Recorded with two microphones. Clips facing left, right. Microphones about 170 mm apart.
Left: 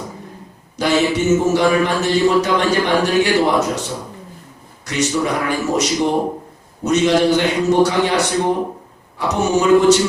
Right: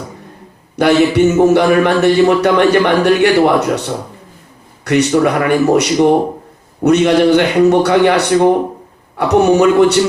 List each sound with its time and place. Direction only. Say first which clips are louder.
0.8 s a man's voice: right 7 dB; 60° right (ahead or behind)